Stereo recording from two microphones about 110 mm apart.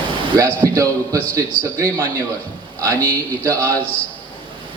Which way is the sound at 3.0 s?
25° right (ahead or behind).